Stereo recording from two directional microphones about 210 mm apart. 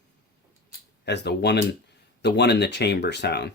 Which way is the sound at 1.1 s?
55° left (ahead or behind).